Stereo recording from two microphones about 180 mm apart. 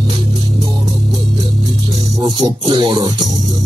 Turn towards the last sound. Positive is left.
turn(degrees=-25)  # may be behind; listen again after turning